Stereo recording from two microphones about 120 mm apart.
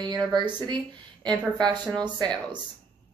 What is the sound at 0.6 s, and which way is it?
A woman's voice, 40° right (ahead or behind).